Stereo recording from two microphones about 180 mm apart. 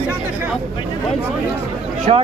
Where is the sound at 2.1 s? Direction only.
35° right (ahead or behind).